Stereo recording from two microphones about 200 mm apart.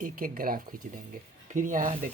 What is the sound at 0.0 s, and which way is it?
Speech, 45° right (ahead or behind).